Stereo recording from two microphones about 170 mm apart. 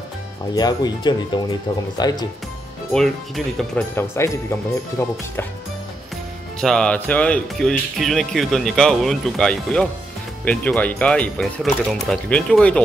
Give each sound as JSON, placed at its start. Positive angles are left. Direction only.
{"t": 0.6, "sound": "speech", "side_deg": 25}
{"t": 2.9, "sound": "speech", "side_deg": 0}
{"t": 3.9, "sound": "speech", "side_deg": 15}
{"t": 6.6, "sound": "speech", "side_deg": 5}